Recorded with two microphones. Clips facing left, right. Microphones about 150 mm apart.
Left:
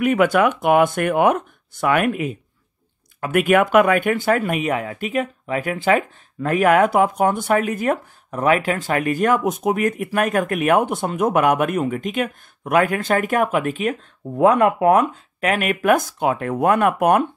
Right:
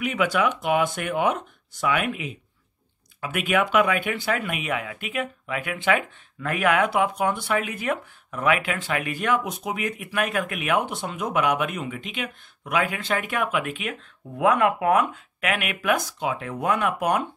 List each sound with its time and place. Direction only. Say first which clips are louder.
0.0 s speech: left 7 dB; 50° left (ahead or behind)